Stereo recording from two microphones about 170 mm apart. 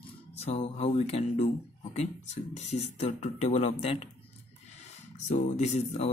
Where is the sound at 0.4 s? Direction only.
40° left (ahead or behind).